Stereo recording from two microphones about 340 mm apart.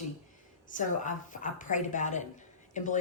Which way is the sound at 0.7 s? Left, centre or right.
Left.